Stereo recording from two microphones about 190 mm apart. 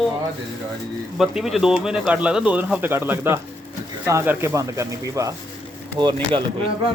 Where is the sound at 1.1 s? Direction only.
Centre (ahead or behind); by 6.4 s 25° right (ahead or behind).